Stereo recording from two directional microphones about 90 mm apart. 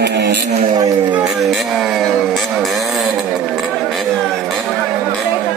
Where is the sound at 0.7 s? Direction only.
55° right (ahead or behind).